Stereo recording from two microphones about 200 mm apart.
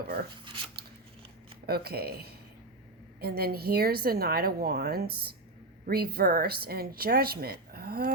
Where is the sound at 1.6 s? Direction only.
50° right (ahead or behind).